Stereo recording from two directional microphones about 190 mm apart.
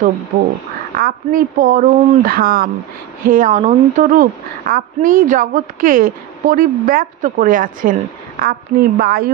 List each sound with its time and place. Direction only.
0.9 s a woman's voice: 50° right (ahead or behind)